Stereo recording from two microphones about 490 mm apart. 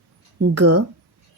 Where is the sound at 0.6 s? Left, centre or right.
Right.